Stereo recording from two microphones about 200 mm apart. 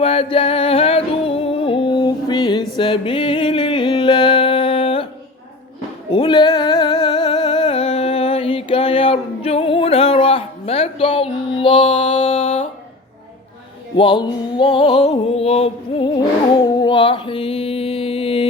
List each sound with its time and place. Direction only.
0.0 s music: 30° left (ahead or behind)
6.1 s music: 25° left (ahead or behind)
13.9 s music: 25° left (ahead or behind)